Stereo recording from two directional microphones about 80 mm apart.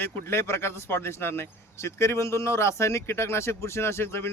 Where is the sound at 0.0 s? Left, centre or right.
Left.